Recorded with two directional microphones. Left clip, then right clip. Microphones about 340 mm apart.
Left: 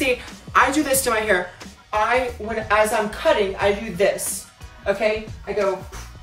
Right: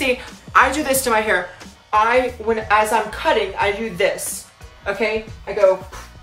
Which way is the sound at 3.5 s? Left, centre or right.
Centre.